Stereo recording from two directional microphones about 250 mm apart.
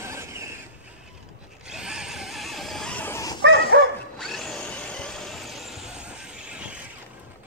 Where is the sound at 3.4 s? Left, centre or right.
Right.